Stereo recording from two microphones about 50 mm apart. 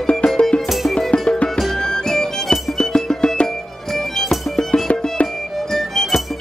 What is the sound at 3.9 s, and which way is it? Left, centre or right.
Music, centre.